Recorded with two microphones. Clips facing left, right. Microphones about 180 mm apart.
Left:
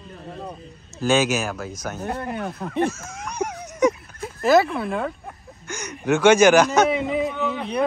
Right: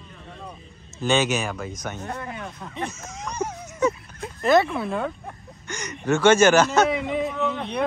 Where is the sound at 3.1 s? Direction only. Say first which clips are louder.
Left 1 dB; 10° left (ahead or behind).